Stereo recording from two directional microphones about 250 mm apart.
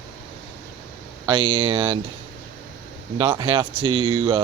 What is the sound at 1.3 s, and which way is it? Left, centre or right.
Speech, centre.